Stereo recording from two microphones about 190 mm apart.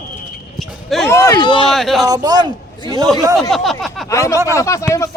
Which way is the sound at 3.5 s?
Centre (ahead or behind).